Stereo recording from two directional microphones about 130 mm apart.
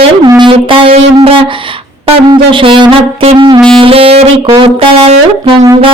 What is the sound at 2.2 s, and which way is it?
Music, 40° right (ahead or behind).